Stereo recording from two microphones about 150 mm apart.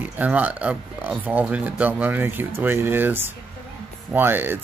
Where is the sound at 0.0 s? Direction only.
10° right (ahead or behind).